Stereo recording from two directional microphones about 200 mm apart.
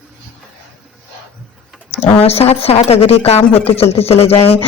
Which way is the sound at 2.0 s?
30° left (ahead or behind).